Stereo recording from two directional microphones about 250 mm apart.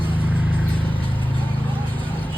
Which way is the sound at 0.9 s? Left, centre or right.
Centre.